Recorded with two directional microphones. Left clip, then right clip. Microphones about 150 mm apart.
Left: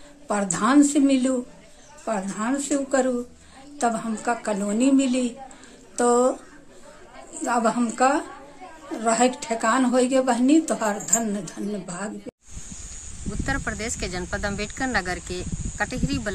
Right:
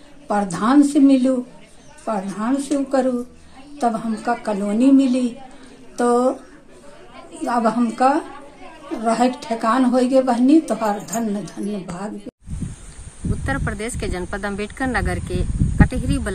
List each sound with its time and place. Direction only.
0.3 s a woman's voice: 15° left (ahead or behind)
7.4 s a woman's voice: 20° left (ahead or behind)
13.5 s a woman's voice: 25° left (ahead or behind)